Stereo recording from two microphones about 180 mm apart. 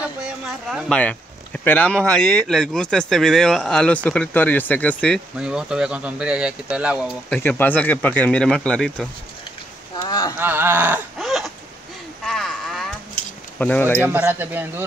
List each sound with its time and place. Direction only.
0.7 s speech: centre (ahead or behind)
5.4 s speech: 5° right (ahead or behind)
7.3 s speech: 10° left (ahead or behind)
10.0 s speech: 20° left (ahead or behind)
10.3 s speech: 10° right (ahead or behind)
11.1 s a sound: centre (ahead or behind)
13.6 s speech: 10° left (ahead or behind)
14.0 s speech: 10° right (ahead or behind)